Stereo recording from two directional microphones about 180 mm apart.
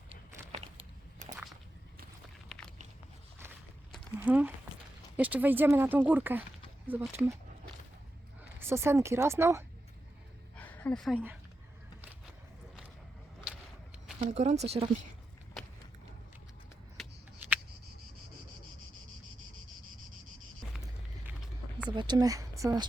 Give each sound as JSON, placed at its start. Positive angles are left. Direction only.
{"t": 0.1, "sound": "a sound", "side_deg": -35}
{"t": 2.5, "sound": "biting", "side_deg": 0}
{"t": 4.2, "sound": "speech", "side_deg": -10}
{"t": 8.5, "sound": "speech", "side_deg": -15}
{"t": 10.6, "sound": "a sound", "side_deg": 10}
{"t": 14.2, "sound": "speech", "side_deg": -40}
{"t": 21.8, "sound": "speech", "side_deg": -25}